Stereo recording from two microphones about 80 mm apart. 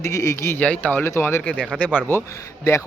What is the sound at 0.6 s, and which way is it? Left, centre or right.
Speech, centre.